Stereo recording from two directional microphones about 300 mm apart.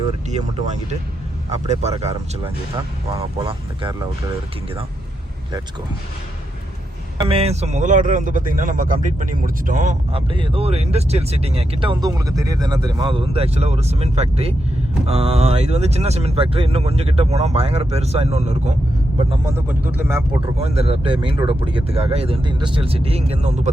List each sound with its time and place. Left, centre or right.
0.3 s speech: right
7.2 s speech: centre
19.3 s speech: centre
20.6 s speech: right